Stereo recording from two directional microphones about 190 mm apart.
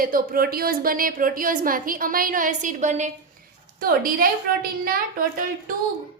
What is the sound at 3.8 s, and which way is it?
Speech, 50° right (ahead or behind).